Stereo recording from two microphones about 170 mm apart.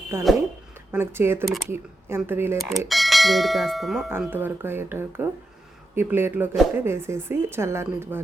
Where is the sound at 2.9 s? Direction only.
Centre (ahead or behind).